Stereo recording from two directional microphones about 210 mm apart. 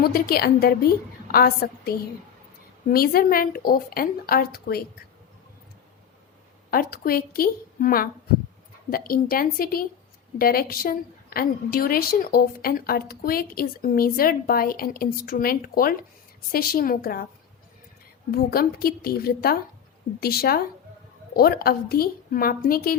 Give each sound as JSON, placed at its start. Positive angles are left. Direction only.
{"t": 0.0, "sound": "a woman's voice", "side_deg": 45}
{"t": 6.7, "sound": "a woman's voice", "side_deg": 45}
{"t": 18.3, "sound": "a woman's voice", "side_deg": 45}